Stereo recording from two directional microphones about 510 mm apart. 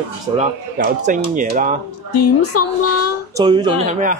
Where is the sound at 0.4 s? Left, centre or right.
Centre.